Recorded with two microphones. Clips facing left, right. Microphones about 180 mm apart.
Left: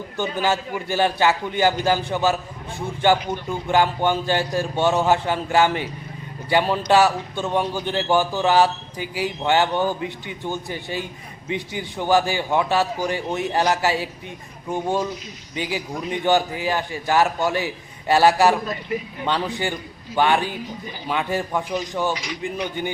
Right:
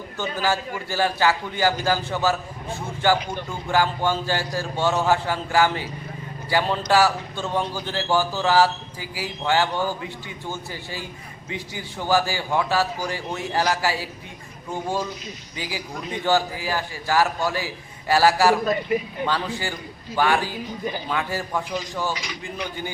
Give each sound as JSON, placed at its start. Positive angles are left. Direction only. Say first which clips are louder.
{"t": 0.2, "sound": "a man's voice", "louder": "left 2 dB", "side_deg": 20}